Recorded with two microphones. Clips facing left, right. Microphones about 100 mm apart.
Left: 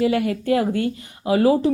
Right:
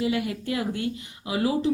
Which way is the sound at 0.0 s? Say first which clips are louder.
Left 6 dB; 55° left (ahead or behind).